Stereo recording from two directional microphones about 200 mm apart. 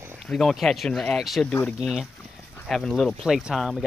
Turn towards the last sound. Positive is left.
turn(degrees=-5)  # may be behind; listen again after turning